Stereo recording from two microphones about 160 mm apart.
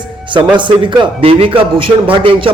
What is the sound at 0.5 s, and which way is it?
A man's voice, 30° right (ahead or behind).